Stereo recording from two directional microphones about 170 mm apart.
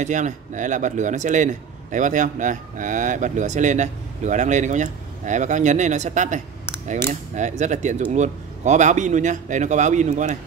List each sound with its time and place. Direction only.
0.0 s speech: 45° right (ahead or behind)